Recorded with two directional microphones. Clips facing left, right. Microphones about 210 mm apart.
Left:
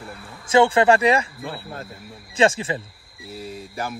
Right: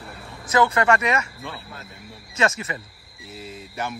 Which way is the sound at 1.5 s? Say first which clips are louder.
Left 5 dB; 45° left (ahead or behind).